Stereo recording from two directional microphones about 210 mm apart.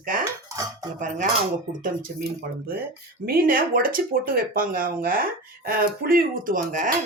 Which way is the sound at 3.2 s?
45° right (ahead or behind).